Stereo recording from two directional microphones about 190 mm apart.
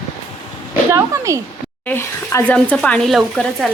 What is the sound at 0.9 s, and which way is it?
Speech, 15° right (ahead or behind).